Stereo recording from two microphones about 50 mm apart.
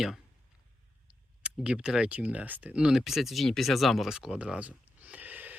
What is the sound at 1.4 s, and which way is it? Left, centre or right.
Speech, centre.